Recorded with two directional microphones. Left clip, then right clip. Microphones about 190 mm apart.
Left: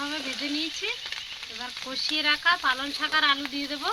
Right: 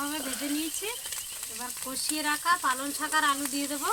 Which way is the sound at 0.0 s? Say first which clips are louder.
Left 2 dB; 10° left (ahead or behind).